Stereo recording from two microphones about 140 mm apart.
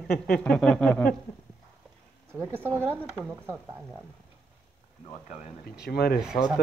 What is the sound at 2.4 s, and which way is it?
Speech, 15° right (ahead or behind).